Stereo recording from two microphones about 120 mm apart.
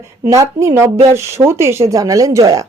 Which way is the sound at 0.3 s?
25° right (ahead or behind).